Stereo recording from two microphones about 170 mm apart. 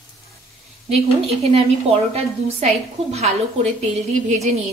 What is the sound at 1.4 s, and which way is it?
A woman's voice, 35° right (ahead or behind).